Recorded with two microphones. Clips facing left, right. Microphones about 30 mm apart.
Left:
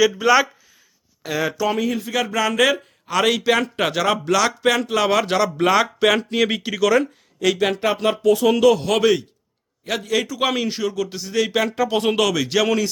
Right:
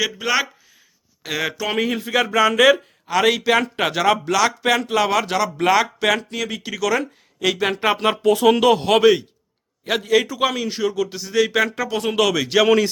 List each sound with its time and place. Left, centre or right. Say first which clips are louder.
0.2 s speech: left 3 dB; centre
1.2 s speech: left 2 dB; right
2.0 s speech: right 4 dB; centre
6.1 s speech: left 6 dB; centre
6.6 s speech: left 4 dB; centre
7.3 s speech: left 1 dB; centre
7.8 s a man's voice: right 1 dB; right
10.4 s speech: even; centre
11.9 s speech: left 3 dB; left
12.1 s speech: right 2 dB; centre